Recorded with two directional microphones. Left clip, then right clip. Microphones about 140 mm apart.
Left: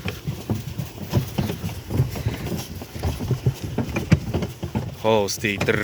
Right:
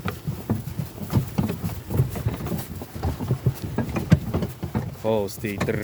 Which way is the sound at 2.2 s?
15° right (ahead or behind).